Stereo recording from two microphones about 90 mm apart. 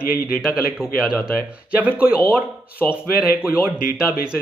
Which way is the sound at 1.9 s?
15° right (ahead or behind).